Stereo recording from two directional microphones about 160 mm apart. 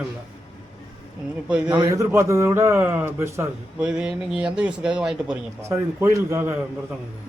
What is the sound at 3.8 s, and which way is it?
Speech, 5° right (ahead or behind).